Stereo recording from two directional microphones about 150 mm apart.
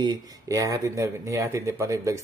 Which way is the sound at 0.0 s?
25° right (ahead or behind).